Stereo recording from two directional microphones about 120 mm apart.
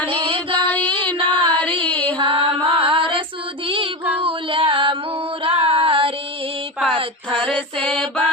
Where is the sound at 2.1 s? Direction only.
45° right (ahead or behind).